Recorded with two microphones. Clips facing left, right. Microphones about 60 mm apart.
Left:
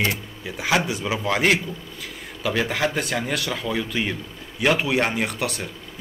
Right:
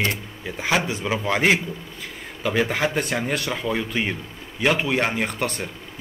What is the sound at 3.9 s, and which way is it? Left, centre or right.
Speech, right.